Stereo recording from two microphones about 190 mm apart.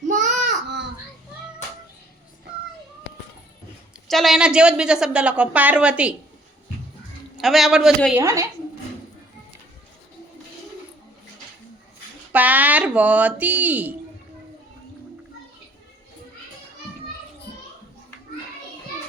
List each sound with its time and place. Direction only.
0.1 s a sound: 40° right (ahead or behind)
4.1 s a woman's voice: centre (ahead or behind)
7.3 s a woman's voice: centre (ahead or behind)
8.2 s speech: 15° right (ahead or behind)
12.3 s speech: 10° right (ahead or behind)